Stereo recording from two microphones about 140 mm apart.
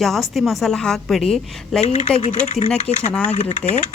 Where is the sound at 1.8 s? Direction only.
55° left (ahead or behind).